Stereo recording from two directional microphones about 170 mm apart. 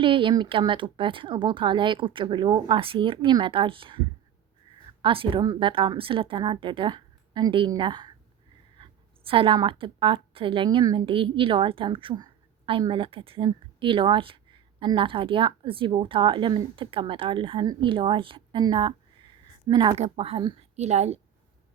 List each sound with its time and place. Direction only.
0.0 s speech: 30° right (ahead or behind)
5.0 s a woman's voice: 30° right (ahead or behind)
20.0 s a woman's voice: 35° right (ahead or behind)